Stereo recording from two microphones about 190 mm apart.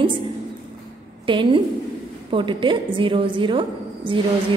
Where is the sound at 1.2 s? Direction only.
25° right (ahead or behind).